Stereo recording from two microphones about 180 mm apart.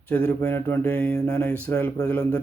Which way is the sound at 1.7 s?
15° left (ahead or behind).